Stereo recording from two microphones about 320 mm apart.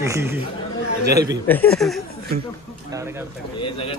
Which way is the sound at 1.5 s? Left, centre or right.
Centre.